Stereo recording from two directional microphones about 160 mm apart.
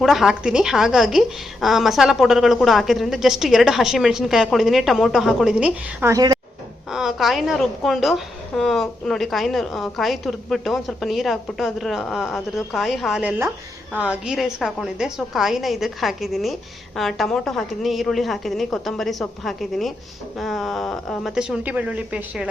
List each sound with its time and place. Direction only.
0.0 s a woman's voice: centre (ahead or behind)
6.1 s a woman's voice: 25° right (ahead or behind)
6.9 s a woman's voice: centre (ahead or behind)